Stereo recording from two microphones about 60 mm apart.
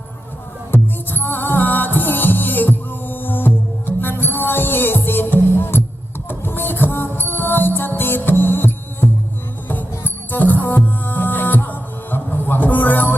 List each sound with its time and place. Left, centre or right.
0.7 s music: left